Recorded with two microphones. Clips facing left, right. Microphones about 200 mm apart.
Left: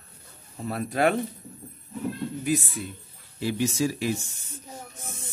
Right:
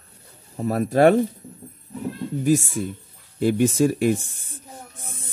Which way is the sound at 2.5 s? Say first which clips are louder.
Right 8 dB; 45° right (ahead or behind).